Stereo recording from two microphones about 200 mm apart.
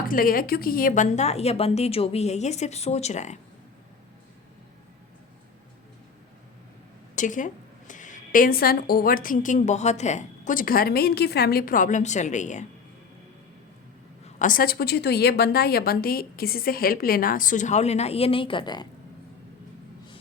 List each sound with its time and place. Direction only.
0.1 s a woman's voice: 45° left (ahead or behind)
7.2 s a woman's voice: 40° left (ahead or behind)
14.3 s a woman's voice: 40° left (ahead or behind); by 18.9 s 20° left (ahead or behind)